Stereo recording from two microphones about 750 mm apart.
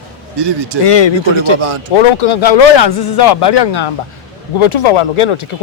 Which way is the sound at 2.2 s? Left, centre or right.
Left.